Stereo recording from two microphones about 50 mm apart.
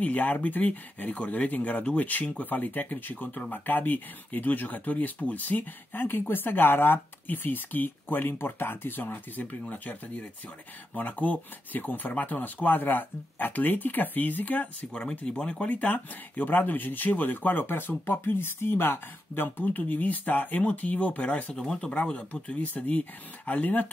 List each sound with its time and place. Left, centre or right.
0.0 s speech: left
9.0 s speech: left
14.9 s speech: centre
21.5 s speech: centre
22.5 s speech: left